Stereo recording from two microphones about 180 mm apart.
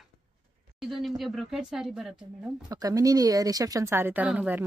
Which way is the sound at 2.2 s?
20° right (ahead or behind).